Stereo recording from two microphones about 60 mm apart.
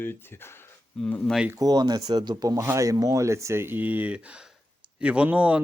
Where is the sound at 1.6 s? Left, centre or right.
Right.